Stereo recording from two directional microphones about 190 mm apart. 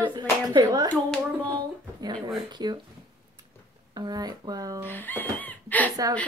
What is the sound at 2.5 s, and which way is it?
Speech, 25° right (ahead or behind).